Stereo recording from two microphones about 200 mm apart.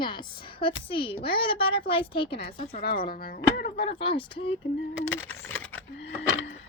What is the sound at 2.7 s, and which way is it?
Speech, 50° left (ahead or behind).